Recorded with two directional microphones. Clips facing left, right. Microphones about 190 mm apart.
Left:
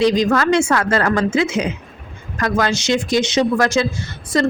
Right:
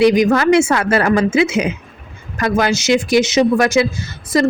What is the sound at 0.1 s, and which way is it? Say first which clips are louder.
A woman's voice: right 3 dB; 20° right (ahead or behind).